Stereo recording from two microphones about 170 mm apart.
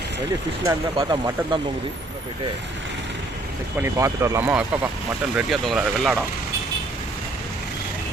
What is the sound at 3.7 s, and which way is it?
Speech, 15° right (ahead or behind).